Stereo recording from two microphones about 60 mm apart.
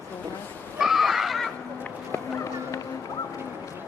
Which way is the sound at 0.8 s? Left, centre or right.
Centre.